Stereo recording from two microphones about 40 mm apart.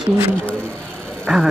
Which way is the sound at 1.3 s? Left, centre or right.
Right.